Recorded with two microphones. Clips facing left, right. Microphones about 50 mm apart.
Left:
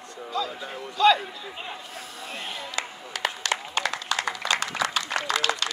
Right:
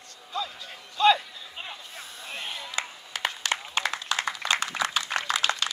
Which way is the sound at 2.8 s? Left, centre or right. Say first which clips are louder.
Left 1 dB; right.